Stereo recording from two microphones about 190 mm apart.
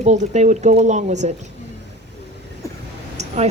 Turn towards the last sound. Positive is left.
turn(degrees=-35)  # may be behind; listen again after turning